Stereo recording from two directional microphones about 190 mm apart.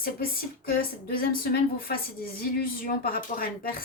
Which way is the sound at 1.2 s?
50° left (ahead or behind).